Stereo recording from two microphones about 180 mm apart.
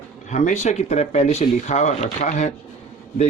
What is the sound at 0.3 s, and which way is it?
Speech, 40° left (ahead or behind).